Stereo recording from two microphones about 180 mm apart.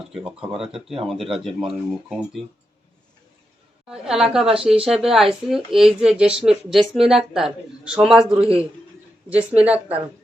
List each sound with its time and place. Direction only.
0.3 s speech: 5° right (ahead or behind)
3.8 s speech: 5° right (ahead or behind)
8.4 s a man's voice: 30° right (ahead or behind)
9.3 s a woman's voice: 5° right (ahead or behind)